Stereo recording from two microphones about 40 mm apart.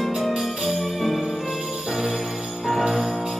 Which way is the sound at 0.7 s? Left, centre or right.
Centre.